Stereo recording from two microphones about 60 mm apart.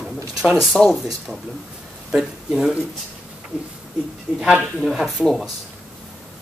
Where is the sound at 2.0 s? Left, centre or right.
Centre.